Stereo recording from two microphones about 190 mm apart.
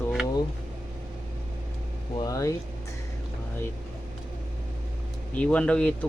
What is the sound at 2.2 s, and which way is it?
Speech, 20° left (ahead or behind).